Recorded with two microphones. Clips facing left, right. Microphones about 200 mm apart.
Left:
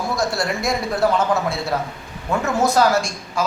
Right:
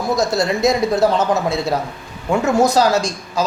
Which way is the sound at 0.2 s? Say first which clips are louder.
Right 6 dB; 20° right (ahead or behind).